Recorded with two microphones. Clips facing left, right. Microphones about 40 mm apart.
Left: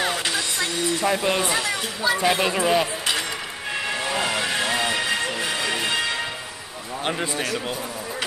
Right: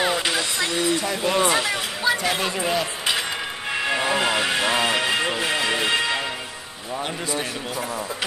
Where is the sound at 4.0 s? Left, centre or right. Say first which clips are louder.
Right 3 dB; right.